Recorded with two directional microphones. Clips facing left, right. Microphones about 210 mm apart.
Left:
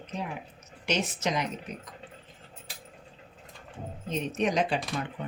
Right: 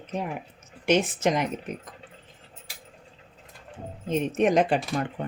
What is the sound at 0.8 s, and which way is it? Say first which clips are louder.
Speech: right 7 dB; 55° right (ahead or behind).